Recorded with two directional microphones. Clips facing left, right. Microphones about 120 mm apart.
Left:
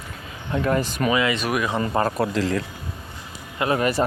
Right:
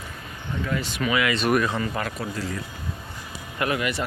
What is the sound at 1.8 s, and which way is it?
Speech, 35° left (ahead or behind).